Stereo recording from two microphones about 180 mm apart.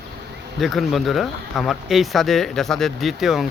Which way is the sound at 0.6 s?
Centre (ahead or behind).